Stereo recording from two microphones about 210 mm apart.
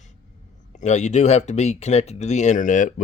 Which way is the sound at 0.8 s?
35° left (ahead or behind).